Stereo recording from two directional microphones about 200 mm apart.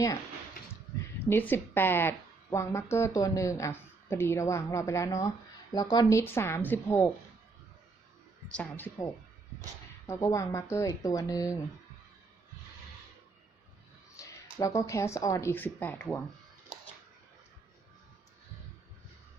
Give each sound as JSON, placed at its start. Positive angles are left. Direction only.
{"t": 1.3, "sound": "a woman's voice", "side_deg": 10}
{"t": 8.4, "sound": "a woman's voice", "side_deg": 5}
{"t": 10.1, "sound": "a woman's voice", "side_deg": 15}
{"t": 14.2, "sound": "speech", "side_deg": 15}